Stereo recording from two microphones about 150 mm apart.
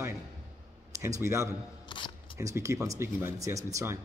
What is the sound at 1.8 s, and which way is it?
Camera, 30° left (ahead or behind).